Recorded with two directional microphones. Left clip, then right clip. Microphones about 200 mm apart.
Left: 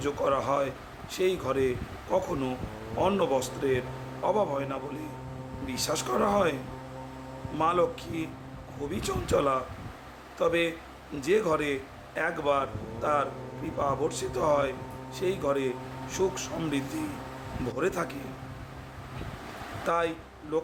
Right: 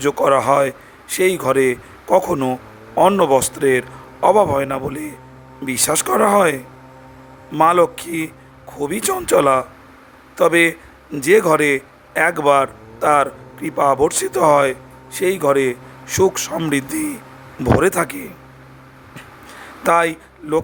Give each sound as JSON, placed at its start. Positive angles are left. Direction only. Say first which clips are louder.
{"t": 0.0, "sound": "a man's voice", "louder": "right 13 dB", "side_deg": -45}
{"t": 19.8, "sound": "speech", "louder": "right 13 dB", "side_deg": -50}